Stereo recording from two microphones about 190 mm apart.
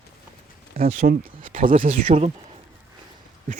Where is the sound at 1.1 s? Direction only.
45° right (ahead or behind).